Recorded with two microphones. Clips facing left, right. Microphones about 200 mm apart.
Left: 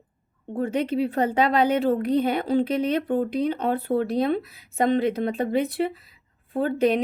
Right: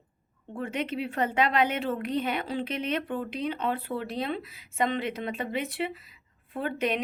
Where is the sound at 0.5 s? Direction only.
35° left (ahead or behind).